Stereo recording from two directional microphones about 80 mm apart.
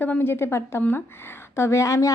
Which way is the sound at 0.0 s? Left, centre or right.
Left.